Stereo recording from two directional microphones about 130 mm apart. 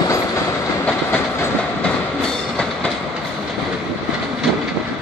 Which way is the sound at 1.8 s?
5° left (ahead or behind).